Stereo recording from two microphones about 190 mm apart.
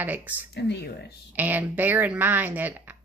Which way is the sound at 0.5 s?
65° left (ahead or behind).